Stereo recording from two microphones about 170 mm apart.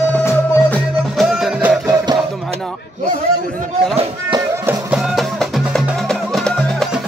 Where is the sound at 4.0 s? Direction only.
30° right (ahead or behind).